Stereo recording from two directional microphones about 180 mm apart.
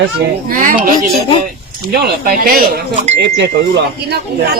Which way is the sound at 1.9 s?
60° right (ahead or behind).